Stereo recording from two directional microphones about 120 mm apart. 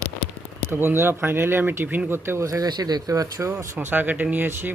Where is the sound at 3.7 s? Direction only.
15° right (ahead or behind).